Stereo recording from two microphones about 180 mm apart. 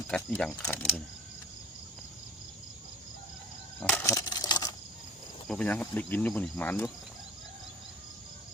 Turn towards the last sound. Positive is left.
turn(degrees=10)  # may be behind; listen again after turning